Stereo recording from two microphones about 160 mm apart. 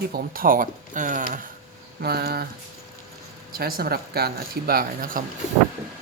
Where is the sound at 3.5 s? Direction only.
70° right (ahead or behind).